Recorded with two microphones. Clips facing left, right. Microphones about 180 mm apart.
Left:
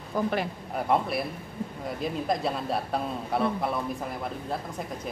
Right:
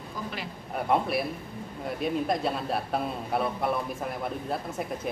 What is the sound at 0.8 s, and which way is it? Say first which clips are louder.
Speech: even; centre (ahead or behind).